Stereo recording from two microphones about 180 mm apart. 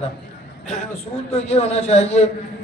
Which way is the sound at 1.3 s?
35° left (ahead or behind).